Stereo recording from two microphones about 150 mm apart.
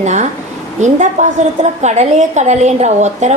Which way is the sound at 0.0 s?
50° right (ahead or behind).